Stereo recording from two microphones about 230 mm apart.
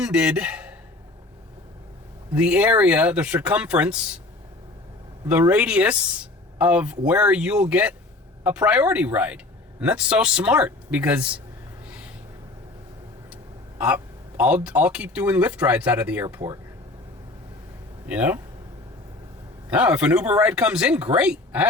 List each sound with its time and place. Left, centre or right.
0.0 s speech: centre
2.3 s speech: centre
5.2 s speech: centre
11.9 s gasp: centre
13.3 s speech: centre
18.1 s speech: centre
19.7 s speech: centre